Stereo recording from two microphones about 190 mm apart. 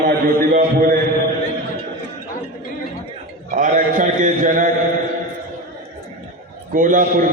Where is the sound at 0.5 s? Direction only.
45° right (ahead or behind).